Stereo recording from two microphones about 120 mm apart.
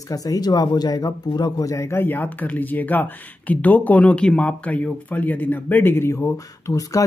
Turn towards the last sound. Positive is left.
turn(degrees=25)  # may be behind; listen again after turning